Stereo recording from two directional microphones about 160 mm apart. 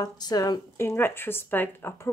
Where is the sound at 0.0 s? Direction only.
25° left (ahead or behind).